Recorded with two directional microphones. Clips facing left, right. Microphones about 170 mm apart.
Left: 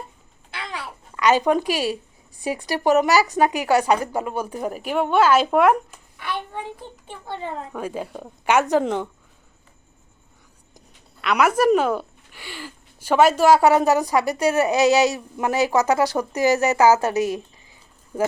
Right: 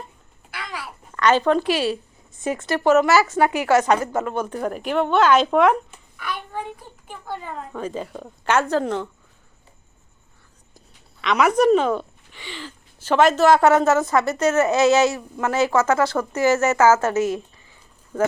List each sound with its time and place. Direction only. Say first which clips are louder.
0.5 s a sound: left 1 dB; 25° left (ahead or behind)
1.1 s speech: even; 10° left (ahead or behind)
7.7 s speech: even; 10° left (ahead or behind)
11.2 s speech: right 1 dB; 5° left (ahead or behind)